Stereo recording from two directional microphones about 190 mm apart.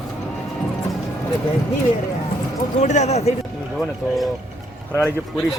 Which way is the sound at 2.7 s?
40° left (ahead or behind).